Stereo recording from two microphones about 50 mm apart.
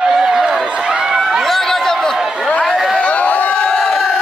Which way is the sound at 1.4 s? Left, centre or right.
Centre.